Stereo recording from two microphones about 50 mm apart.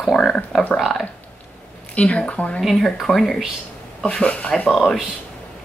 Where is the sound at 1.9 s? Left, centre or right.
Left.